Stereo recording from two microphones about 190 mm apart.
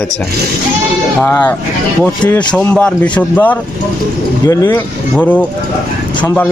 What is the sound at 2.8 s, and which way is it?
Speech, 10° left (ahead or behind).